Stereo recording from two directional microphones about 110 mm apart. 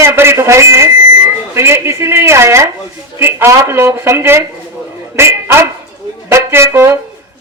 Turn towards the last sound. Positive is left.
turn(degrees=-25)  # may be behind; listen again after turning